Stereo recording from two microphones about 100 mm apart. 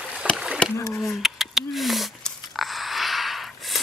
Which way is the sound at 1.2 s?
Centre (ahead or behind).